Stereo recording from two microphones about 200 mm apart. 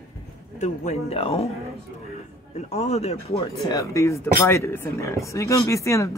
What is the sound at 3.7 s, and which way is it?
Speech, 15° left (ahead or behind).